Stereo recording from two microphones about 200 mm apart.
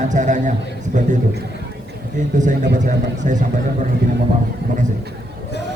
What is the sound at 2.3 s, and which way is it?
A man's voice, 40° right (ahead or behind).